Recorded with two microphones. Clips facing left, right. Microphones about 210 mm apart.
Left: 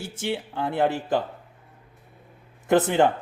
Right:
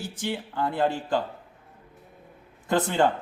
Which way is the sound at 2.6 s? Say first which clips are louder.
Left 4 dB; 20° left (ahead or behind).